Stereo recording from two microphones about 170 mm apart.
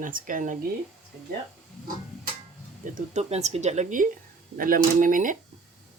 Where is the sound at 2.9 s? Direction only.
40° right (ahead or behind).